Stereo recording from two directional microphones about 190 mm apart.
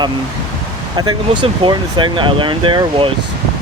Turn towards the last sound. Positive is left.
turn(degrees=-25)  # may be behind; listen again after turning